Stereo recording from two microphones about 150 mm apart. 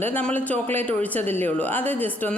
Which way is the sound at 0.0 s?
10° left (ahead or behind).